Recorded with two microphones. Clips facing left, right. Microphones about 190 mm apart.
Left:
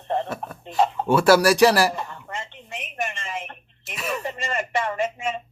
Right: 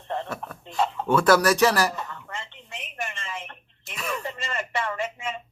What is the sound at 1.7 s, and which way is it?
Speech, 30° left (ahead or behind).